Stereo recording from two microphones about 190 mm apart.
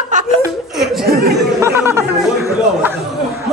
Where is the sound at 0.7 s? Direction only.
Centre (ahead or behind).